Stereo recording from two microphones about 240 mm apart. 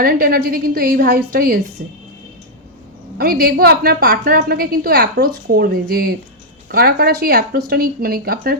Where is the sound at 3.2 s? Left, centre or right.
Right.